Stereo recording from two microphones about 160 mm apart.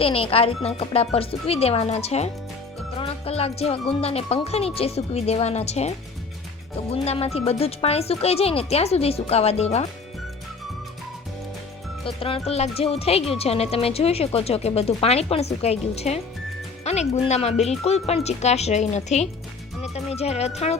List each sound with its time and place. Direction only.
0.0 s a woman's voice: 35° left (ahead or behind)
6.9 s a woman's voice: 40° left (ahead or behind)
12.0 s a woman's voice: 35° left (ahead or behind)